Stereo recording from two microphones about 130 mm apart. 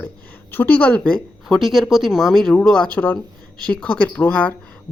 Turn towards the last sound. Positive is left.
turn(degrees=10)  # may be behind; listen again after turning